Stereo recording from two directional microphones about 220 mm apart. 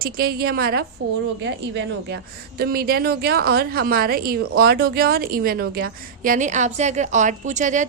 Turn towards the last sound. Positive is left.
turn(degrees=-35)  # may be behind; listen again after turning